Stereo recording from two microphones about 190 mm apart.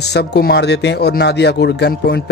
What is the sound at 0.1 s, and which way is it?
Speech, 60° left (ahead or behind).